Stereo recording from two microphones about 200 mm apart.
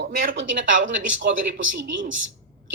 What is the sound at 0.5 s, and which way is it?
Speech, 70° right (ahead or behind).